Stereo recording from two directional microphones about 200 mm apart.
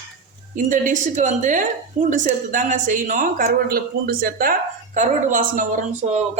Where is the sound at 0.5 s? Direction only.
40° right (ahead or behind).